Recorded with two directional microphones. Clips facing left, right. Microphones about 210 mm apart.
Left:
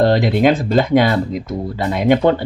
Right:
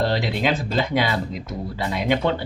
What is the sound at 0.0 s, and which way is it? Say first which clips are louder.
Speech: left 9 dB; 50° left (ahead or behind).